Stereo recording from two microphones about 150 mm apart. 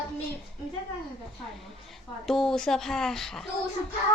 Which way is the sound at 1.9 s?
Centre (ahead or behind).